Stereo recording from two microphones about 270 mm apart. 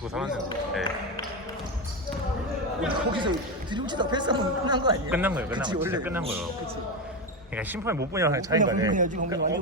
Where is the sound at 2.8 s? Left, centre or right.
Centre.